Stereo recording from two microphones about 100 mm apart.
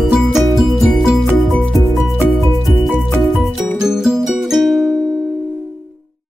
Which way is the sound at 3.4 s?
5° right (ahead or behind).